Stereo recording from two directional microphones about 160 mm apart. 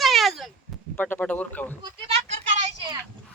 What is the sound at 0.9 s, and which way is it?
Speech, 10° left (ahead or behind).